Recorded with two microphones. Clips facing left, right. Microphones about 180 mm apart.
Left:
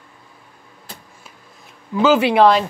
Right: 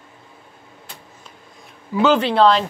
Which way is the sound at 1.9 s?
5° left (ahead or behind).